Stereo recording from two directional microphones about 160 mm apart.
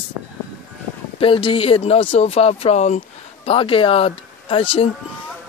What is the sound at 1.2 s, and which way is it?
Speech, 35° left (ahead or behind).